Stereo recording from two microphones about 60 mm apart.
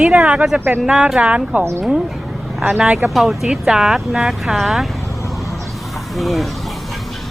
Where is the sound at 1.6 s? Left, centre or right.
Right.